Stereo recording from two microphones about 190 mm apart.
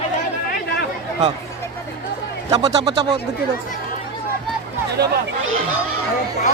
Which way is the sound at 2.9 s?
30° right (ahead or behind).